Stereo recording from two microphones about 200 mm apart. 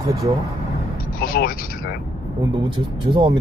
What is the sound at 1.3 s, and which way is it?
Speech, 45° left (ahead or behind).